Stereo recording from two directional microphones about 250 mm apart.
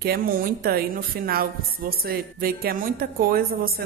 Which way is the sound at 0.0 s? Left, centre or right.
Right.